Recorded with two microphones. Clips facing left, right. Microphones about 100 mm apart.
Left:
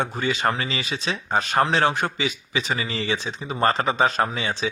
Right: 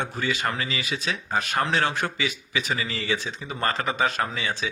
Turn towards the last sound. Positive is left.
turn(degrees=25)  # may be behind; listen again after turning